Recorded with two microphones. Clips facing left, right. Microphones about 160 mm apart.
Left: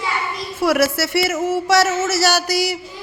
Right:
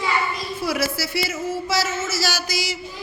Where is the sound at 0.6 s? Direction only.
75° left (ahead or behind).